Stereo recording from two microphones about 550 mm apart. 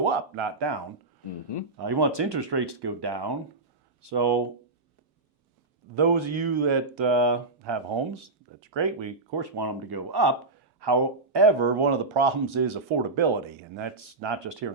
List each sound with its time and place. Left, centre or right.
0.0 s speech: right
1.7 s speech: right
5.9 s speech: right